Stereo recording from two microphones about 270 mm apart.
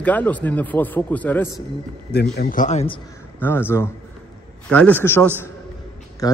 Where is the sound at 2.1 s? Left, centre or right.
Left.